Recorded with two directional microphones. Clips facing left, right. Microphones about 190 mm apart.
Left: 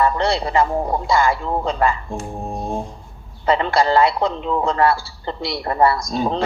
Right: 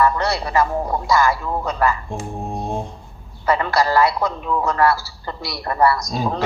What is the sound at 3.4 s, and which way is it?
A man's voice, 25° left (ahead or behind).